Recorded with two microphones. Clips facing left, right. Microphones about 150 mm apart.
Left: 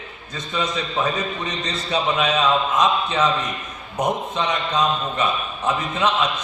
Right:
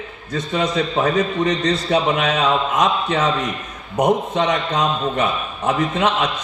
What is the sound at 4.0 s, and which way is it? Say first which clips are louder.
Speech: right 5 dB; 65° right (ahead or behind).